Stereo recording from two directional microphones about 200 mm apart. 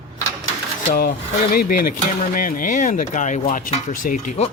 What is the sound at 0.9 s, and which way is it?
Speech, 45° left (ahead or behind).